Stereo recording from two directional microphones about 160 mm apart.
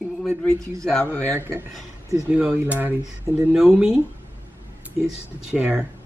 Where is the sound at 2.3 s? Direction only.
10° right (ahead or behind).